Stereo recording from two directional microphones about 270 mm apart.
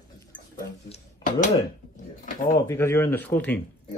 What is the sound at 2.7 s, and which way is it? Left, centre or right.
Speech, centre.